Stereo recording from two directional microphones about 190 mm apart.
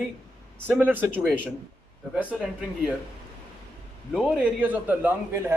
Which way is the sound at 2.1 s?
5° right (ahead or behind).